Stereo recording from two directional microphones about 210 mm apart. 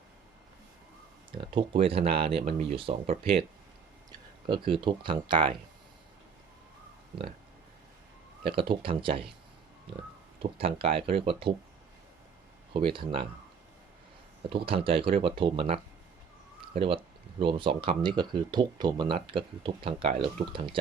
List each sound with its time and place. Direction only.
1.4 s speech: 25° right (ahead or behind)
4.4 s speech: 25° right (ahead or behind)
8.4 s speech: 25° right (ahead or behind)
10.4 s speech: 25° right (ahead or behind)
12.7 s speech: 25° right (ahead or behind)
14.5 s speech: 25° right (ahead or behind)
16.6 s a sound: 25° right (ahead or behind)
17.4 s speech: 25° right (ahead or behind)